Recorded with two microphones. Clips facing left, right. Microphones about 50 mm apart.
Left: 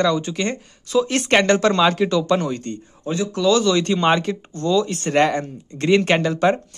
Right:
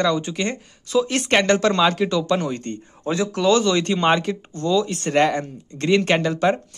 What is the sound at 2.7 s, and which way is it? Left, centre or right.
Speech, right.